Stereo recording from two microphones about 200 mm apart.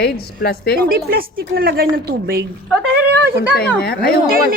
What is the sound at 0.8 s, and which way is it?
A woman's voice, 45° right (ahead or behind).